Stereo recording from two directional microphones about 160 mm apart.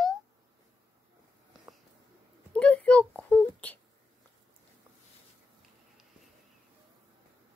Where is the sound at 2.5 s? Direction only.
5° left (ahead or behind).